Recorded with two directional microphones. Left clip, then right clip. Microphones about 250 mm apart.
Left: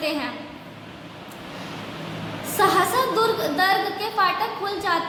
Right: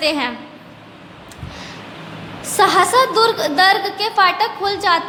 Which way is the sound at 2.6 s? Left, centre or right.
Right.